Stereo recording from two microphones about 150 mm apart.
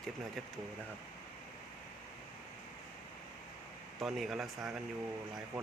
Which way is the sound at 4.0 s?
Centre (ahead or behind).